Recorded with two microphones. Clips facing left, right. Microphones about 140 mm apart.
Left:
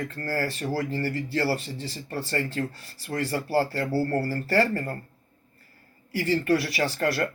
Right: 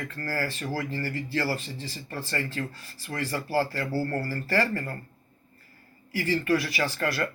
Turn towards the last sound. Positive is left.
turn(degrees=35)  # may be behind; listen again after turning